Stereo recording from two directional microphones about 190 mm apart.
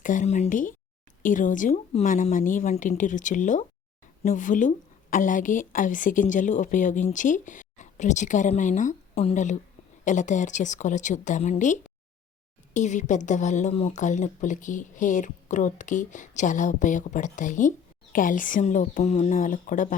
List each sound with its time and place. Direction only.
0.0 s a woman's voice: 45° left (ahead or behind)